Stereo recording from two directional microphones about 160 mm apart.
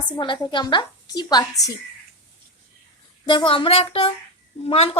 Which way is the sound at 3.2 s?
30° left (ahead or behind).